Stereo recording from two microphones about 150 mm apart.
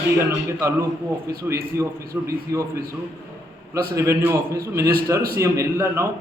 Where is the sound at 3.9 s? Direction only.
20° right (ahead or behind).